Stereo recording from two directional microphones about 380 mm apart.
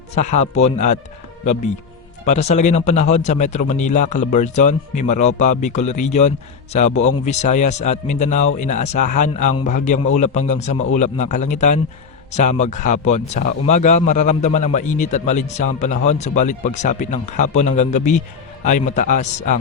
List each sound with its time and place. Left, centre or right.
0.1 s a man's voice: centre
2.2 s a man's voice: centre
19.2 s a man's voice: centre